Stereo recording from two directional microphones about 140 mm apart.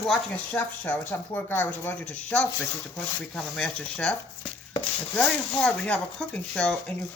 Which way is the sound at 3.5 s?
5° left (ahead or behind).